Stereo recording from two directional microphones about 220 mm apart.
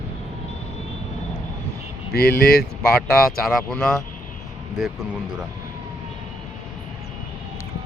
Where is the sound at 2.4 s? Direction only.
45° left (ahead or behind).